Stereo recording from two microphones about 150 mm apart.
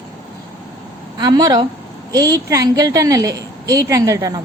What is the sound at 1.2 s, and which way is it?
A woman's voice, 25° right (ahead or behind).